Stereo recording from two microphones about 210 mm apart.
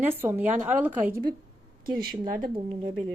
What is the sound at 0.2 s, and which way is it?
A woman's voice, 10° right (ahead or behind).